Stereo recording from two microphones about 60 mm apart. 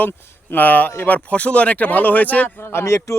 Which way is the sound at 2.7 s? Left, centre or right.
Left.